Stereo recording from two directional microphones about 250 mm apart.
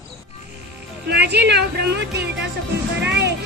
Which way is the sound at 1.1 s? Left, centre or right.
Right.